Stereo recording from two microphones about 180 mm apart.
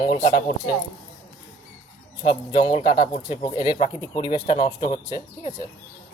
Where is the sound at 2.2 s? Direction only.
25° left (ahead or behind).